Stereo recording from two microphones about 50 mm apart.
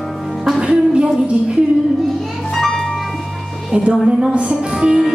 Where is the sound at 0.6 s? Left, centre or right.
Right.